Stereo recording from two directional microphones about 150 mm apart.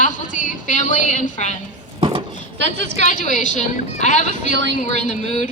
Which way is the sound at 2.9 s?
50° left (ahead or behind).